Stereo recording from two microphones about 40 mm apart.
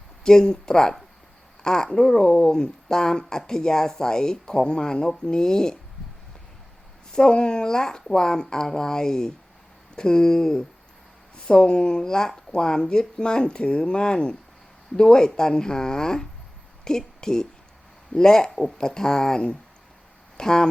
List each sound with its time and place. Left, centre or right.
0.3 s speech: centre
7.2 s speech: left